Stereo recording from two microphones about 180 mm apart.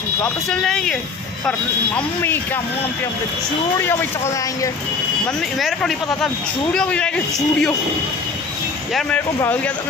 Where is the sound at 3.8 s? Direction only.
15° left (ahead or behind).